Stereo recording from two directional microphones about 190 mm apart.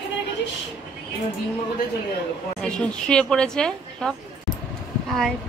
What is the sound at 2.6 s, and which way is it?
A woman's voice, 5° left (ahead or behind).